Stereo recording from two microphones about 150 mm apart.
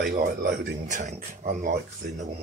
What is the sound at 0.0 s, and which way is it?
Speech, 90° right.